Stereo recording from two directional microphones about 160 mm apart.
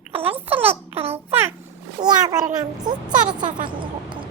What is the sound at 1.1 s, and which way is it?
Speech, 15° right (ahead or behind).